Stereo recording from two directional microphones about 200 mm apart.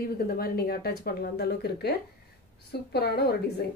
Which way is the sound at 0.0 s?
50° left (ahead or behind).